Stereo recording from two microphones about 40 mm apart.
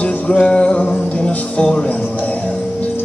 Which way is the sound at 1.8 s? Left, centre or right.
Left.